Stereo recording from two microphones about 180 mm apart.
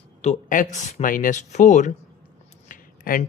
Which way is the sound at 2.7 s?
50° left (ahead or behind).